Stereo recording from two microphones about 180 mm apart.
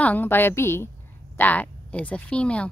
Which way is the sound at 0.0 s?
10° left (ahead or behind).